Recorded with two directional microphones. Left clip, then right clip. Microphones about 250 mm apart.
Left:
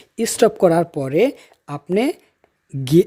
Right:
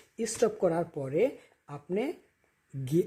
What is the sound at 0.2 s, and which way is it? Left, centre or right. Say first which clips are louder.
Speech: left 13 dB; left.